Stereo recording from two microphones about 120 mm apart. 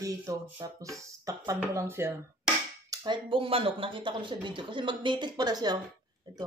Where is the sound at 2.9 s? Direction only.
40° right (ahead or behind).